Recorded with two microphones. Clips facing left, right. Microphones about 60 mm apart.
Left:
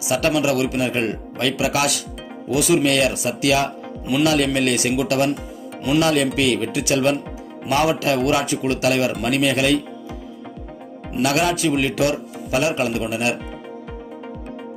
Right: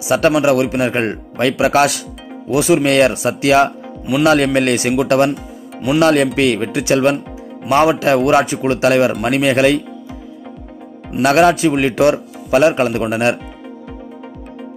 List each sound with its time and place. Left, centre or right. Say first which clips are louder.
0.4 s a man's voice: right 6 dB; right
8.3 s speech: right 6 dB; right
8.6 s a man's voice: right 6 dB; right
11.2 s a man's voice: right 8 dB; right